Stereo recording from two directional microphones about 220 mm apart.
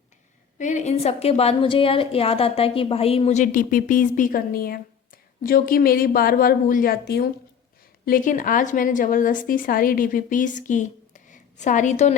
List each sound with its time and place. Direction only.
0.6 s a woman's voice: 35° left (ahead or behind)